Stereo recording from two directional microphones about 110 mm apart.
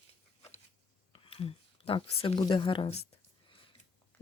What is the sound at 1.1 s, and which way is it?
Speech, 55° left (ahead or behind).